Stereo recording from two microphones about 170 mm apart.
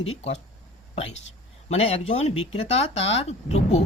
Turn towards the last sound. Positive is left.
turn(degrees=40)  # may be behind; listen again after turning